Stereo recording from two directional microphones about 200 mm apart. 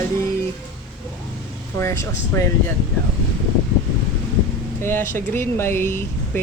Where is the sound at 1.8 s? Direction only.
15° left (ahead or behind).